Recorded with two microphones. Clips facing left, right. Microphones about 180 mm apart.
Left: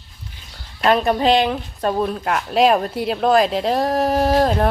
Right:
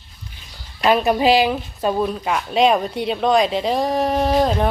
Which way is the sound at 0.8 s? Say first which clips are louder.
Even; 5° right (ahead or behind).